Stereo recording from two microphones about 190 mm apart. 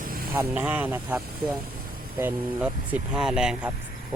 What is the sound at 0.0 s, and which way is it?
Vehicle, 50° right (ahead or behind).